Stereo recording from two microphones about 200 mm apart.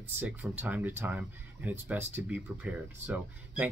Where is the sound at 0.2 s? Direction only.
10° right (ahead or behind).